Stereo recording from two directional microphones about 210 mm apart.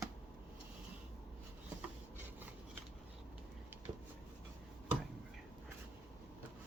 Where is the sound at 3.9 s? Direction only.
20° right (ahead or behind).